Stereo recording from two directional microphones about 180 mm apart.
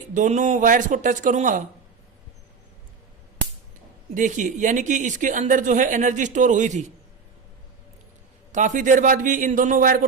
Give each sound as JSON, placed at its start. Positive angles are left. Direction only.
{"t": 0.1, "sound": "speech", "side_deg": -45}
{"t": 4.1, "sound": "speech", "side_deg": -45}
{"t": 8.5, "sound": "speech", "side_deg": -45}